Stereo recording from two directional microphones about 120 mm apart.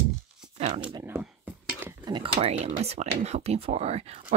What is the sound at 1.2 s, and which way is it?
Cutlery, 15° right (ahead or behind).